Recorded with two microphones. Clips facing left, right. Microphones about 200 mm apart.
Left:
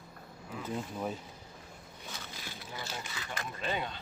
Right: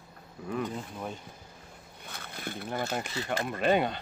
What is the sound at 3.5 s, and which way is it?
Speech, 65° right (ahead or behind).